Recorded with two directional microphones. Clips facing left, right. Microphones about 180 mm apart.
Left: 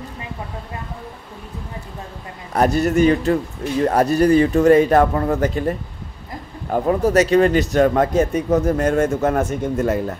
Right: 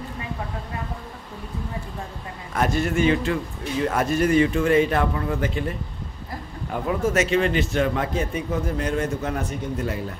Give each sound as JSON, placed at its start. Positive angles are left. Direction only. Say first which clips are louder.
{"t": 2.5, "sound": "a man's voice", "louder": "left 6 dB", "side_deg": 40}